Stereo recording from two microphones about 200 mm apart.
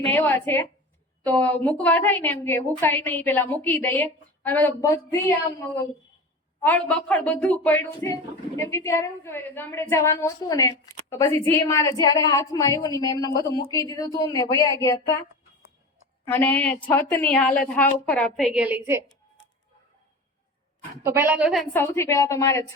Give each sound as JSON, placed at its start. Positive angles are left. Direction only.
{"t": 0.1, "sound": "a woman's voice", "side_deg": 10}
{"t": 6.6, "sound": "a woman's voice", "side_deg": 5}
{"t": 16.2, "sound": "a woman's voice", "side_deg": 10}
{"t": 21.0, "sound": "a woman's voice", "side_deg": -15}
{"t": 21.7, "sound": "a woman's voice", "side_deg": 10}